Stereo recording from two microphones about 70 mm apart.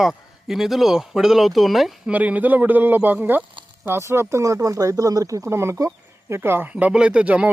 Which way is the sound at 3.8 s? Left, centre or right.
Right.